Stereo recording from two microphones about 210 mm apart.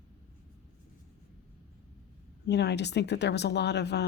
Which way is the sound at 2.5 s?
55° left (ahead or behind).